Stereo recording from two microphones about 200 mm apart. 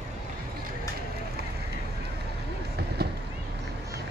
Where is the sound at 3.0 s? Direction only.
55° right (ahead or behind).